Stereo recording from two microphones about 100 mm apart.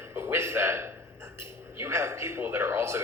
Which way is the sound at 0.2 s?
25° right (ahead or behind).